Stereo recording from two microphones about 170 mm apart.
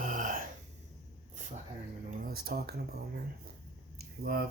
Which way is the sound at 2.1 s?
55° right (ahead or behind).